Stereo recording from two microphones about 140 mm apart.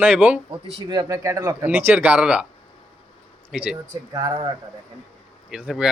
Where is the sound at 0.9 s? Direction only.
25° right (ahead or behind).